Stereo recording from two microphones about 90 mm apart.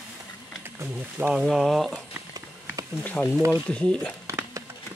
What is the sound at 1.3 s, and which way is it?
Speech, 5° right (ahead or behind).